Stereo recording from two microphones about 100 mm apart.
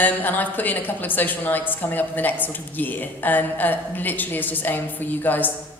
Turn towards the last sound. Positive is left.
turn(degrees=20)  # may be behind; listen again after turning